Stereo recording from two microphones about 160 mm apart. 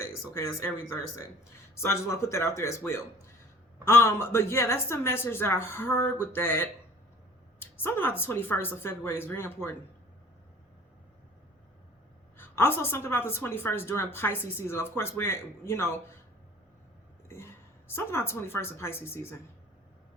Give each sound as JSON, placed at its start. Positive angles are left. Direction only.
{"t": 0.0, "sound": "speech", "side_deg": 15}
{"t": 1.7, "sound": "a woman's voice", "side_deg": 15}
{"t": 12.4, "sound": "a woman's voice", "side_deg": 15}
{"t": 17.2, "sound": "throat clearing", "side_deg": 15}
{"t": 17.9, "sound": "a woman's voice", "side_deg": 15}